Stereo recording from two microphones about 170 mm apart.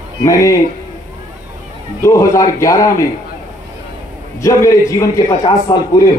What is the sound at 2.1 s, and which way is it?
Speech, 20° left (ahead or behind).